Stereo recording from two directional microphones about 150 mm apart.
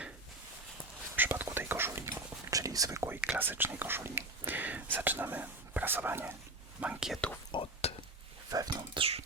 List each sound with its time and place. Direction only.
1.1 s whispering: 15° right (ahead or behind)
3.3 s speech: 15° right (ahead or behind)
7.5 s whispering: 40° left (ahead or behind)
8.4 s a sound: 25° right (ahead or behind)
9.0 s beatboxing: 40° right (ahead or behind)